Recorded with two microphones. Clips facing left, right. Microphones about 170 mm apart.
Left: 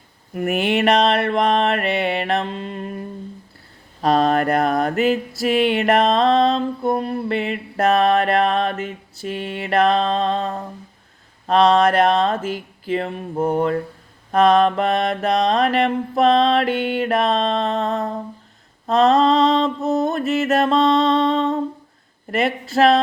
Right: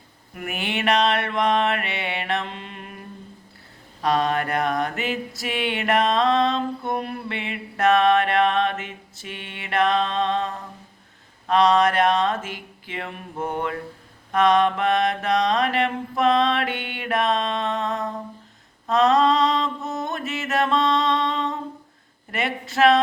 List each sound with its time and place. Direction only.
0.4 s mantra: 40° left (ahead or behind)
4.0 s mantra: 35° left (ahead or behind)